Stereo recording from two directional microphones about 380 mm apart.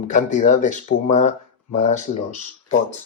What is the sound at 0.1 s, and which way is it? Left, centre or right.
Speech, centre.